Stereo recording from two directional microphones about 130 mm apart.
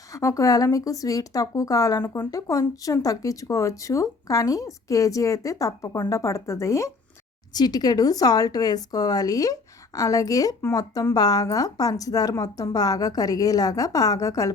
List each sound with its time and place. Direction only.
0.1 s speech: 25° left (ahead or behind)